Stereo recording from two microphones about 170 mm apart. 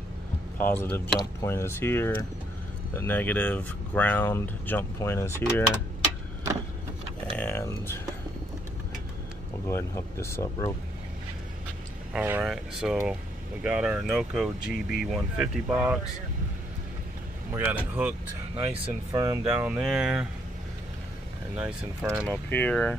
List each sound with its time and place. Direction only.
0.6 s speech: 10° left (ahead or behind)
7.3 s speech: 15° left (ahead or behind)
9.7 s speech: 15° left (ahead or behind)
12.1 s speech: 10° right (ahead or behind)
17.6 s speech: 10° right (ahead or behind)
19.1 s speech: 20° right (ahead or behind)
19.4 s speech: 5° right (ahead or behind)
21.5 s speech: 5° right (ahead or behind)
22.3 s speech: 10° left (ahead or behind)